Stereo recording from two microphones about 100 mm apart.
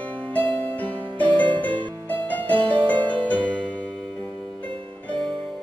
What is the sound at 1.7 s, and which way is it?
Music, 55° right (ahead or behind).